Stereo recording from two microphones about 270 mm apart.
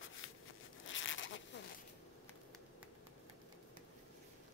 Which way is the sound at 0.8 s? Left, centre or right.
Left.